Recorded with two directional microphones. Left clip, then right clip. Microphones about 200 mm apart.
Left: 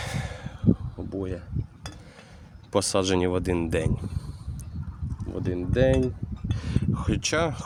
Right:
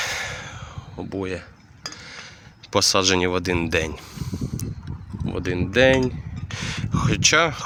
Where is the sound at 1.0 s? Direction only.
15° right (ahead or behind).